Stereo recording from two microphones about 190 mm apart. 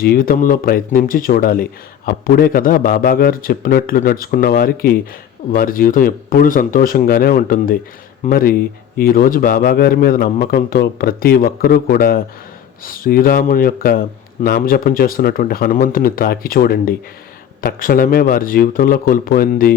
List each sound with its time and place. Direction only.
0.0 s a man's voice: 50° left (ahead or behind)